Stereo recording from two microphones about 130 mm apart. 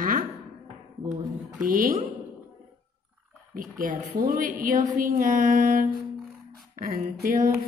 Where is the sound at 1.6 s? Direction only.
90° right.